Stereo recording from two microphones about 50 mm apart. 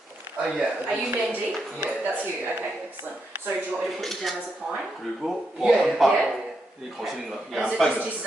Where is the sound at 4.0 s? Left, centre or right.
Centre.